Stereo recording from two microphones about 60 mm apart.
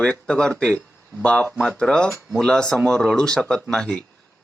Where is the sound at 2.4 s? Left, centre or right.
Centre.